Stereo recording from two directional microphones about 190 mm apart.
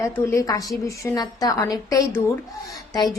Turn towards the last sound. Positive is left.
turn(degrees=20)  # may be behind; listen again after turning